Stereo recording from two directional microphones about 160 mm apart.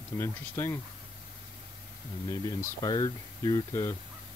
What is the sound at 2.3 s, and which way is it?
Speech, 25° left (ahead or behind).